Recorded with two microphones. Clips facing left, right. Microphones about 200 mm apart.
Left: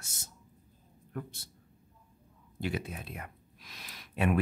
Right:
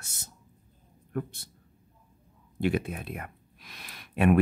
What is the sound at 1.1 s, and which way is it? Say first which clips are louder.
Speech: right 7 dB; 60° right (ahead or behind).